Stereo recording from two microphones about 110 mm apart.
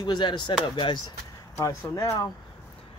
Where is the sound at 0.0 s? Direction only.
45° left (ahead or behind).